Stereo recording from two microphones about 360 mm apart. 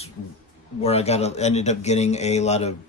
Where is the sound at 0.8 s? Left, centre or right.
Centre.